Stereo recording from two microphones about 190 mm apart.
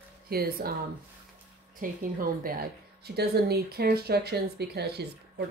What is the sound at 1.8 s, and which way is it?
A woman's voice, 50° right (ahead or behind).